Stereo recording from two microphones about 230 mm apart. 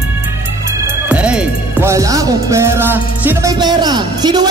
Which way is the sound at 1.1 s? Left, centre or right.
Centre.